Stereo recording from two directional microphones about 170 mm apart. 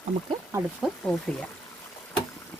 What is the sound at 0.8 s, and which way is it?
Speech, 5° left (ahead or behind).